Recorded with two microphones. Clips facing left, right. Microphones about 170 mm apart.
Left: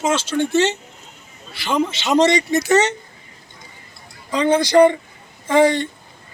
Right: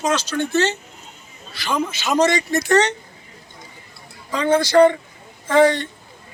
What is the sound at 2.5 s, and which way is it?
Speech, 5° left (ahead or behind).